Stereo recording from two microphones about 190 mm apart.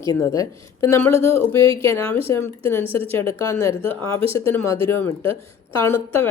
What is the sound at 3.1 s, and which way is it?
A woman's voice, 10° left (ahead or behind).